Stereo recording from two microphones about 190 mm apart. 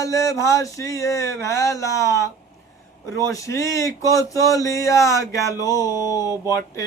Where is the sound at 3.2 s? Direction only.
15° left (ahead or behind).